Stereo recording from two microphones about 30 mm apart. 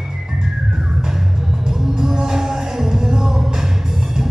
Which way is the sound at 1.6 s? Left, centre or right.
Centre.